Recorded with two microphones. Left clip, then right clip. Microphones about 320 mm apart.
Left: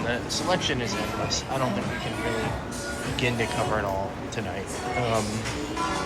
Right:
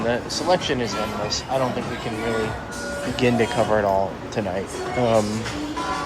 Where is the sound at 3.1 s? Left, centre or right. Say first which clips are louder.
Right 7 dB; right.